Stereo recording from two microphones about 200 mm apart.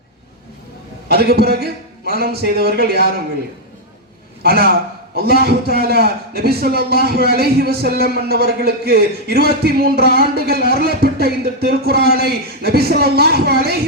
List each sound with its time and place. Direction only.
1.0 s a man's voice: 50° right (ahead or behind)
4.4 s a man's voice: 50° right (ahead or behind)